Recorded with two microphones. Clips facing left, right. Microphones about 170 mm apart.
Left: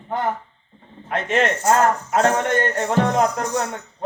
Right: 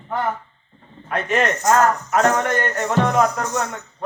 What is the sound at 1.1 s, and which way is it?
A man's voice, 25° left (ahead or behind).